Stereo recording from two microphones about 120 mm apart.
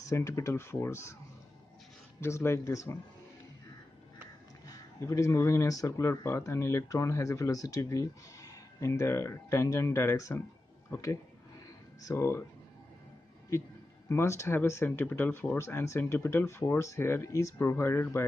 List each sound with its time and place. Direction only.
0.0 s speech: 25° left (ahead or behind)
2.1 s speech: 20° left (ahead or behind)
4.6 s speech: 25° left (ahead or behind)
12.0 s speech: 25° left (ahead or behind)
14.0 s speech: 25° left (ahead or behind)